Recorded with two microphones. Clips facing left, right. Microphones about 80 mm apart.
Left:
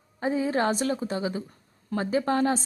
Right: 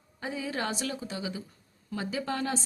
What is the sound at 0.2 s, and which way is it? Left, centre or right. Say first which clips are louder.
Speech: left 8 dB; left.